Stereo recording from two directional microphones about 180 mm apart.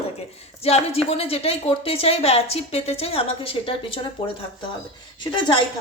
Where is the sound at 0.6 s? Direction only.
35° left (ahead or behind).